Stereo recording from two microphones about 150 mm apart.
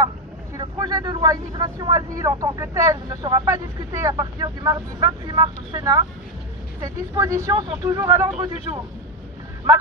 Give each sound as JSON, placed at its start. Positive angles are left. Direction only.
{"t": 0.6, "sound": "speech", "side_deg": -25}